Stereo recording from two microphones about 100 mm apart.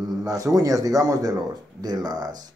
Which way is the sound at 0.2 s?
35° right (ahead or behind).